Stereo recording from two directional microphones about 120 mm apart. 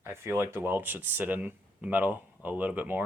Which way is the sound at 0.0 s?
20° right (ahead or behind).